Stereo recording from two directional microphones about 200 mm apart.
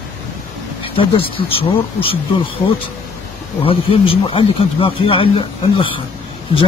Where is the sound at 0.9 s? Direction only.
25° left (ahead or behind).